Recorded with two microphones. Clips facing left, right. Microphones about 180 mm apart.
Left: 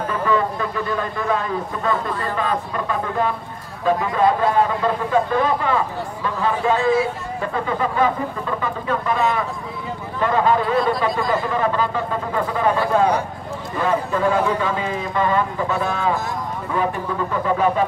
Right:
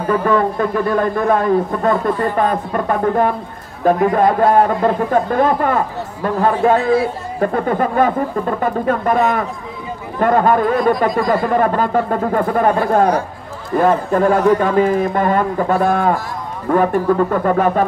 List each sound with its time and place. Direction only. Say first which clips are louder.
0.1 s a man's voice: right 7 dB; 50° right (ahead or behind)